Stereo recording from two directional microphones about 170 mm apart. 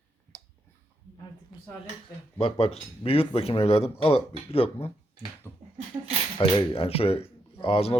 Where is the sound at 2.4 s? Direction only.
35° left (ahead or behind).